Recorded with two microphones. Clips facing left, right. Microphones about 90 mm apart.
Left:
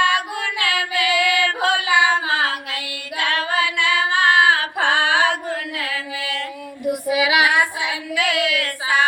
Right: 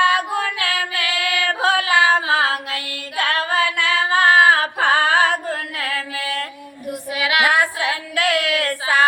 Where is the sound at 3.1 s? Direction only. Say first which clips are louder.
Right 1 dB; 40° right (ahead or behind).